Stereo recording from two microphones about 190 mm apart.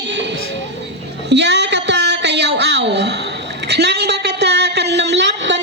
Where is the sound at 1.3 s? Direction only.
65° right (ahead or behind).